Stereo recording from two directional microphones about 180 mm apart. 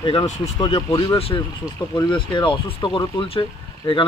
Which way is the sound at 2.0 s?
25° left (ahead or behind).